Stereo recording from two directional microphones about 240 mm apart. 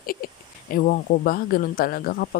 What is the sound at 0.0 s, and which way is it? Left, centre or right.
Speech, left.